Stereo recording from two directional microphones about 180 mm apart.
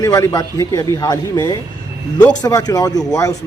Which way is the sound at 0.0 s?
20° left (ahead or behind).